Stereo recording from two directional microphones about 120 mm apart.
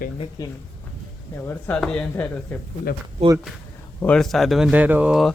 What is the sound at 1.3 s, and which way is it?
Speech, 20° left (ahead or behind).